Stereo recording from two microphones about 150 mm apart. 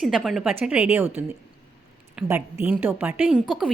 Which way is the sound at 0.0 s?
Centre (ahead or behind).